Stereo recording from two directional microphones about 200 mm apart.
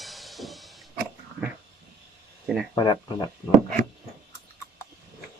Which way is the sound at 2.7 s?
20° left (ahead or behind).